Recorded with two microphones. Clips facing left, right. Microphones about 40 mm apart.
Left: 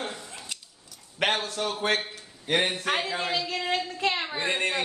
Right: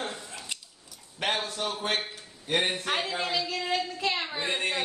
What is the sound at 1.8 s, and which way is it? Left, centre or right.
Speech, left.